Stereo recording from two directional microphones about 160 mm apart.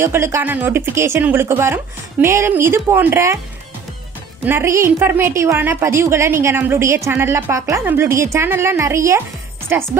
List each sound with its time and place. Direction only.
0.0 s speech: 15° right (ahead or behind)
4.5 s speech: 15° right (ahead or behind)